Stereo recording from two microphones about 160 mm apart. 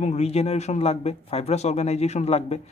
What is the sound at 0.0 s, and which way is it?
Speech, 40° left (ahead or behind).